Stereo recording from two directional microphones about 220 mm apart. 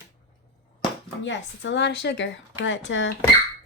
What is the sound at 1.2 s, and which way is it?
Speech, 55° left (ahead or behind).